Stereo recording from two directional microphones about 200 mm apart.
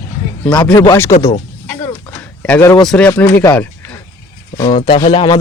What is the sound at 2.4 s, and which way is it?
Speech, 10° left (ahead or behind).